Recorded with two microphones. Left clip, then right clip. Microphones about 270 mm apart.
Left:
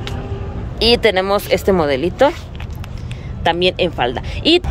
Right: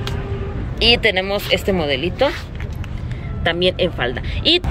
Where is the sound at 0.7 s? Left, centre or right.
Centre.